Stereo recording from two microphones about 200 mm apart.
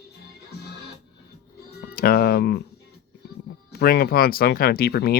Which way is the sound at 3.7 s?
50° left (ahead or behind).